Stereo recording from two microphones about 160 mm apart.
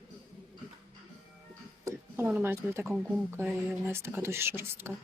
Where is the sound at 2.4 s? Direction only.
15° right (ahead or behind).